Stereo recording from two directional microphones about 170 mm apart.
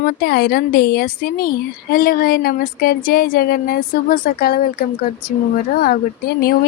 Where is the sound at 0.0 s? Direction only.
65° left (ahead or behind).